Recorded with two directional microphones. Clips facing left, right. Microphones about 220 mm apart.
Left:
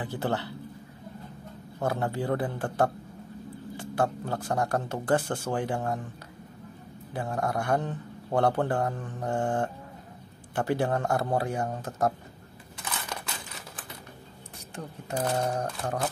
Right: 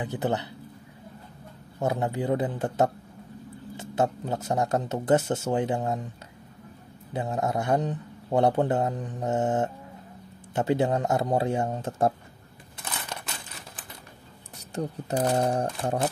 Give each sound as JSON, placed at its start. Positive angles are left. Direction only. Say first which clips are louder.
{"t": 0.0, "sound": "a man's voice", "louder": "right 2 dB", "side_deg": -20}
{"t": 1.8, "sound": "a man's voice", "louder": "right 2 dB", "side_deg": -20}
{"t": 7.2, "sound": "a man's voice", "louder": "right 2 dB", "side_deg": -20}
{"t": 14.8, "sound": "a man's voice", "louder": "right 5 dB", "side_deg": -30}